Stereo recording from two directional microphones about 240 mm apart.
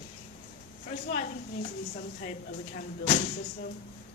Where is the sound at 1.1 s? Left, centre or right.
Left.